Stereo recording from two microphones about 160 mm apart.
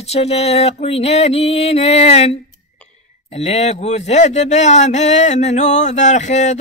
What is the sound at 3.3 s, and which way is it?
Speech, 45° left (ahead or behind).